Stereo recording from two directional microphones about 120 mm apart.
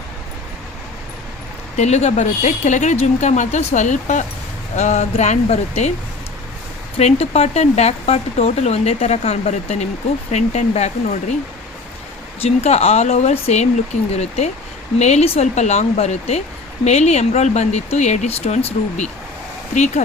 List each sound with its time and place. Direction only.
1.7 s speech: 70° left (ahead or behind); by 4.3 s 90° left
4.8 s speech: 70° left (ahead or behind)
6.9 s speech: 60° left (ahead or behind)
12.4 s speech: 65° left (ahead or behind)